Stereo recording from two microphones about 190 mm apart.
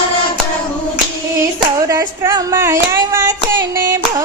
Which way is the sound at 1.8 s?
15° right (ahead or behind).